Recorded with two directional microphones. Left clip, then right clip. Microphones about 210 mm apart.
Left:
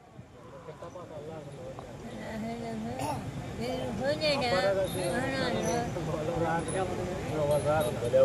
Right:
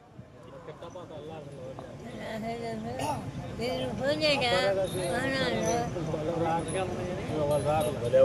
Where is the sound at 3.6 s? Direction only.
45° right (ahead or behind).